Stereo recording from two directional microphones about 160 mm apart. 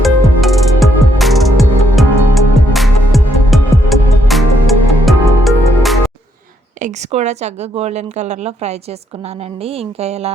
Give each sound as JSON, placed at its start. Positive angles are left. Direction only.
{"t": 0.0, "sound": "music", "side_deg": 0}
{"t": 6.7, "sound": "a woman's voice", "side_deg": -45}
{"t": 9.6, "sound": "a sound", "side_deg": -40}